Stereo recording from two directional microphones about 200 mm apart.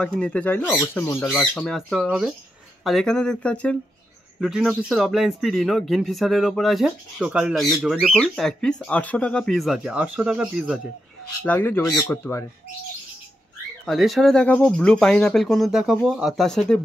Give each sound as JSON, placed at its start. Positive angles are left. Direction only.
{"t": 0.0, "sound": "speech", "side_deg": 5}
{"t": 11.4, "sound": "speech", "side_deg": 10}
{"t": 13.8, "sound": "speech", "side_deg": 0}